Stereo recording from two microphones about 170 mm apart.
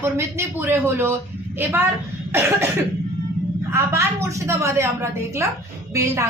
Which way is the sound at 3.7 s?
15° right (ahead or behind).